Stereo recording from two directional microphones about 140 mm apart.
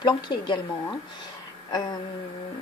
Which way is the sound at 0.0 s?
35° left (ahead or behind).